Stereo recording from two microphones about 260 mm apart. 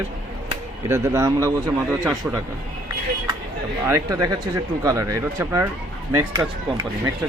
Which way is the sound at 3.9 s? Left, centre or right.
Centre.